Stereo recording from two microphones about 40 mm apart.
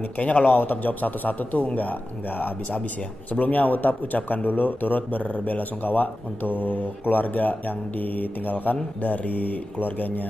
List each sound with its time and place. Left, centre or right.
0.2 s a man's voice: left
5.6 s a man's voice: left